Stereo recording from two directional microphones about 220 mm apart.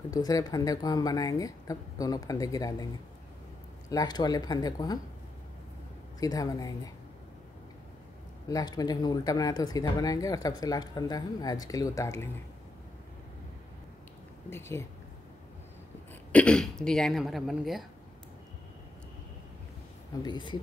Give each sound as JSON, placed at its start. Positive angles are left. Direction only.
{"t": 0.1, "sound": "speech", "side_deg": 15}
{"t": 3.9, "sound": "speech", "side_deg": 20}
{"t": 6.1, "sound": "speech", "side_deg": 15}
{"t": 8.5, "sound": "speech", "side_deg": 15}
{"t": 14.5, "sound": "speech", "side_deg": 10}
{"t": 16.3, "sound": "speech", "side_deg": 5}
{"t": 20.2, "sound": "speech", "side_deg": 20}